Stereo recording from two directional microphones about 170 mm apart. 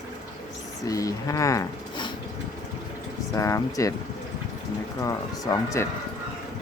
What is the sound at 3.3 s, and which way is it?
Speech, 20° left (ahead or behind).